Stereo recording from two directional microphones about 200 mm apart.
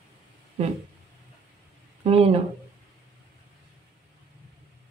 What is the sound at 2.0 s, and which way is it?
Speech, 30° right (ahead or behind).